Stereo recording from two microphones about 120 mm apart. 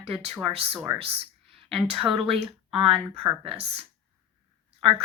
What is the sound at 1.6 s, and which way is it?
A woman's voice, 50° right (ahead or behind).